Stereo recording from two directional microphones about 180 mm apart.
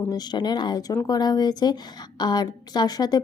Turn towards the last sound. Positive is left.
turn(degrees=20)  # may be behind; listen again after turning